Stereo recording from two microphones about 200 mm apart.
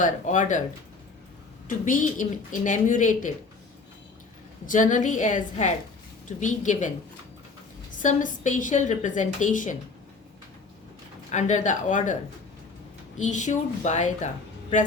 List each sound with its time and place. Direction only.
0.0 s a woman's voice: 40° left (ahead or behind)
1.6 s a woman's voice: 40° left (ahead or behind)
4.6 s a woman's voice: 40° left (ahead or behind)
8.0 s a woman's voice: 40° left (ahead or behind)
11.3 s a woman's voice: 35° left (ahead or behind)
13.1 s a woman's voice: 35° left (ahead or behind)